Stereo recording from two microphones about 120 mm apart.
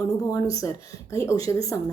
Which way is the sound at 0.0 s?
30° left (ahead or behind).